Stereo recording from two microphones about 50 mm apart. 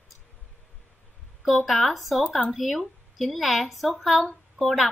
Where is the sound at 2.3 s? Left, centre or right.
Left.